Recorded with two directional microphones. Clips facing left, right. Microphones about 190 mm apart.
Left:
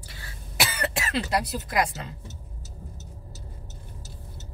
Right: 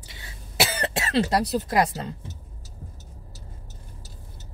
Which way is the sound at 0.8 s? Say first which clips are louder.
Right 5 dB; 30° right (ahead or behind).